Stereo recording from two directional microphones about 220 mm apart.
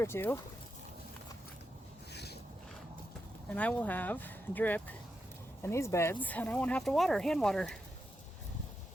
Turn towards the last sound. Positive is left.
turn(degrees=0)  # may be behind; listen again after turning